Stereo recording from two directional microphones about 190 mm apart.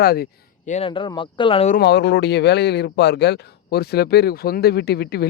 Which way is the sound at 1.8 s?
60° left (ahead or behind).